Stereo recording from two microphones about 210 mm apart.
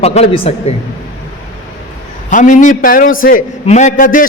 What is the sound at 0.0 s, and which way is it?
Speech, 30° left (ahead or behind).